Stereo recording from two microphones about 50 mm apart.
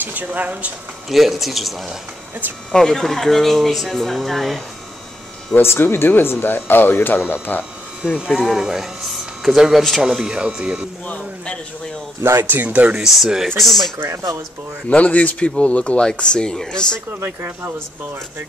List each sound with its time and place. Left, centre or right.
0.0 s speech: right
1.0 s speech: centre
5.6 s speech: left
8.3 s speech: centre
10.0 s speech: centre
12.2 s speech: right
12.6 s speech: right
13.1 s speech: centre
14.0 s speech: right
14.9 s speech: left